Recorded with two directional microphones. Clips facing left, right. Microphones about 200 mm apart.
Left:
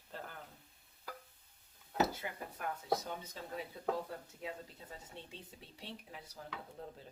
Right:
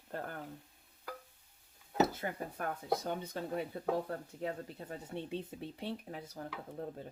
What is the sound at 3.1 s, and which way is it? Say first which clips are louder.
Speech: right 7 dB; 60° right (ahead or behind).